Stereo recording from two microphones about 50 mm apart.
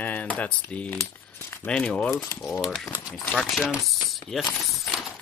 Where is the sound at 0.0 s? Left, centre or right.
Left.